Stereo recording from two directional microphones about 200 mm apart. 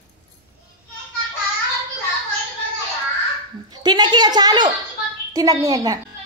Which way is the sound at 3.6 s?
20° right (ahead or behind).